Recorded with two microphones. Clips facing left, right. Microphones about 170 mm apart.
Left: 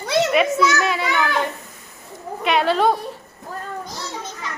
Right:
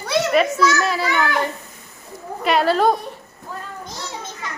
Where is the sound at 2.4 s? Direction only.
5° right (ahead or behind).